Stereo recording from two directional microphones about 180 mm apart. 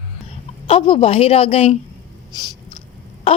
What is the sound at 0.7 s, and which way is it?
A woman's voice, 30° left (ahead or behind).